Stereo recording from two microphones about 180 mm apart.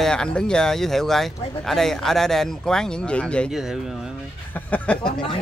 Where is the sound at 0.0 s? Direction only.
5° left (ahead or behind).